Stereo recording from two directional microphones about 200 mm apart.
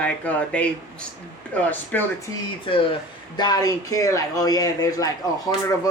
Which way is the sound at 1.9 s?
10° left (ahead or behind).